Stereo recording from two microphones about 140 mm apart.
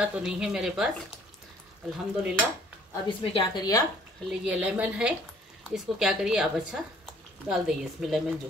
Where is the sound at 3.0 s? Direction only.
35° left (ahead or behind).